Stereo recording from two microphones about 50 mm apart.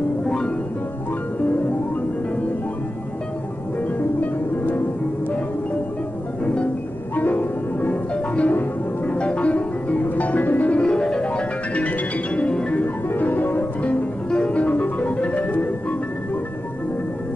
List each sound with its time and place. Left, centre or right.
4.2 s music: left
6.4 s music: left
7.2 s music: left; by 12.7 s centre
13.1 s music: left